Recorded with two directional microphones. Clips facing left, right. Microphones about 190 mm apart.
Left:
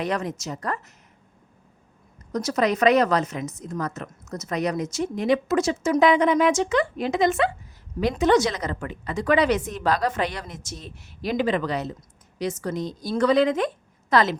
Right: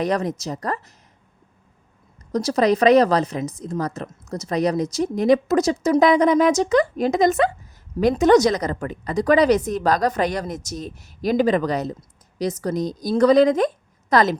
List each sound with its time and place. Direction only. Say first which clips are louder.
0.0 s a woman's voice: right 5 dB; 40° right (ahead or behind)
2.3 s a woman's voice: right 4 dB; 35° right (ahead or behind)